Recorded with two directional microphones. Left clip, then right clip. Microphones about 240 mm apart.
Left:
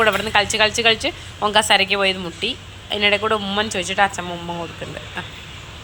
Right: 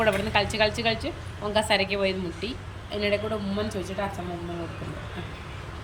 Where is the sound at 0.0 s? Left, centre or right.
Centre.